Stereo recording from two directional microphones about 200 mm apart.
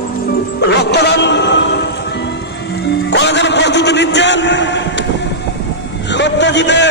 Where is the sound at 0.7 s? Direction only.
55° left (ahead or behind).